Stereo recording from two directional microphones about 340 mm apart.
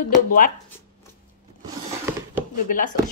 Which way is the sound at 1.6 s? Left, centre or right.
Centre.